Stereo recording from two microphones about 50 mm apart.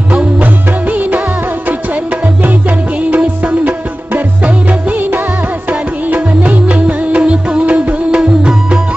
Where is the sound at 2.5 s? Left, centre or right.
Right.